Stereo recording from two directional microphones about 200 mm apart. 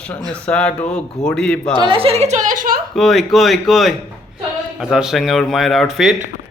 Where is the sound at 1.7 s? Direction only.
25° right (ahead or behind); by 2.8 s 45° right (ahead or behind).